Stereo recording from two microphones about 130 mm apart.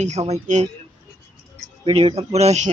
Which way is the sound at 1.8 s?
45° right (ahead or behind).